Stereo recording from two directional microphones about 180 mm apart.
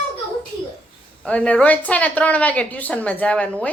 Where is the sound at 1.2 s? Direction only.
5° left (ahead or behind).